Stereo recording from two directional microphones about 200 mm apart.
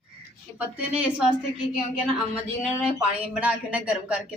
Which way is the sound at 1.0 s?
5° right (ahead or behind).